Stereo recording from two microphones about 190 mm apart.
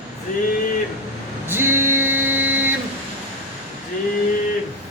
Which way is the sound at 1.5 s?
10° right (ahead or behind).